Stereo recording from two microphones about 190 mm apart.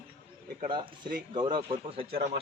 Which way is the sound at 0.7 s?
25° right (ahead or behind).